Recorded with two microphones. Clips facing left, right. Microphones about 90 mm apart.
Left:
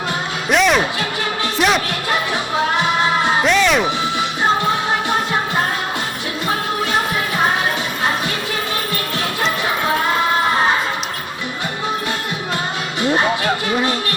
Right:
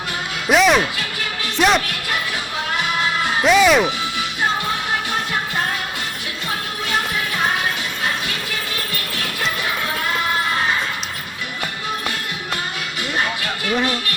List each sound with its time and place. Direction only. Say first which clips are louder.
0.5 s music: even; centre (ahead or behind)
3.4 s music: right 6 dB; 5° right (ahead or behind)
13.0 s a sound: left 7 dB; 30° left (ahead or behind)